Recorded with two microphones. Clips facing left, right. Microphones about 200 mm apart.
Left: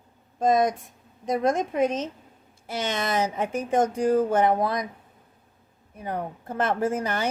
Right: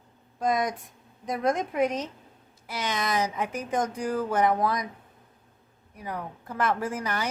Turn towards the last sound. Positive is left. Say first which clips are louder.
# left 5 dB
turn(degrees=25)  # may be behind; listen again after turning